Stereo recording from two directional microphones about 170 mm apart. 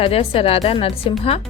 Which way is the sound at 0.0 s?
35° left (ahead or behind).